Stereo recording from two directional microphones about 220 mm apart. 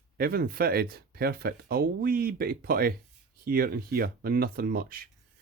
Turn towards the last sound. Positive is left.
turn(degrees=-40)  # may be behind; listen again after turning